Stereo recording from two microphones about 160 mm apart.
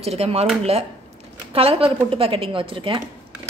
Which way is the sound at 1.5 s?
35° right (ahead or behind).